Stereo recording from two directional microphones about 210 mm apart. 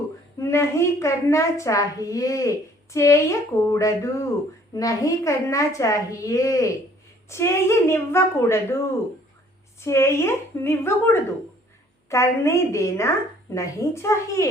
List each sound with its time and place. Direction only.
0.3 s a woman's voice: 15° left (ahead or behind)
9.8 s a woman's voice: 15° left (ahead or behind)